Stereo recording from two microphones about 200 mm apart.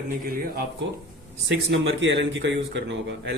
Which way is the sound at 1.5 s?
65° right (ahead or behind).